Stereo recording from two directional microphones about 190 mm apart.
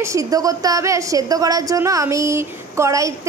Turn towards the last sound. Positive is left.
turn(degrees=-15)  # may be behind; listen again after turning